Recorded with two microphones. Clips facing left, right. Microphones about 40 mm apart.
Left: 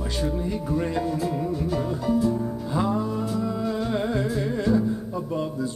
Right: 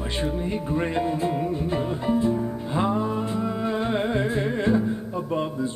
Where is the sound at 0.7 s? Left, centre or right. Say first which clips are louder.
Right 1 dB; right.